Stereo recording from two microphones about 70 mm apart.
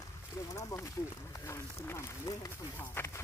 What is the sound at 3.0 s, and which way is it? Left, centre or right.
Speech, left.